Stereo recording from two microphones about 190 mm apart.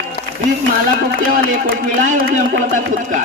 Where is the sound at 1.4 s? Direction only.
50° right (ahead or behind).